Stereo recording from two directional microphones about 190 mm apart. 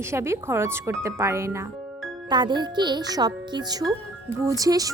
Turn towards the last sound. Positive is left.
turn(degrees=-20)  # may be behind; listen again after turning